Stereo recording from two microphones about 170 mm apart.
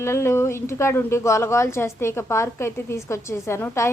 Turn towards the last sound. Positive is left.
turn(degrees=15)  # may be behind; listen again after turning